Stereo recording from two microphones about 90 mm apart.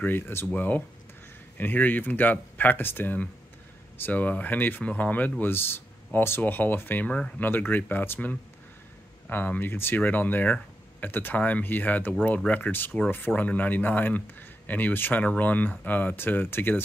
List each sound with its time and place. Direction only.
0.0 s speech: 25° left (ahead or behind)